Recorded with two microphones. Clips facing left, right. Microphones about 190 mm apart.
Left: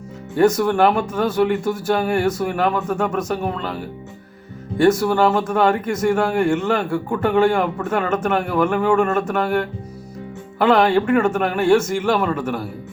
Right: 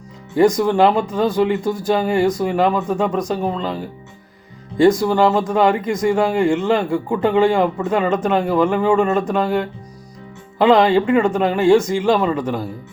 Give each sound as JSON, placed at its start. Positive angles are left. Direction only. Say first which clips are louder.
{"t": 0.3, "sound": "speech", "louder": "right 2 dB", "side_deg": -15}